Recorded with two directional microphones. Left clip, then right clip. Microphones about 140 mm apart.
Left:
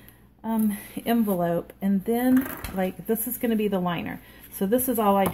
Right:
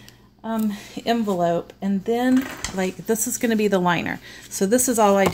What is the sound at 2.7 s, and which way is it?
Speech, 25° right (ahead or behind).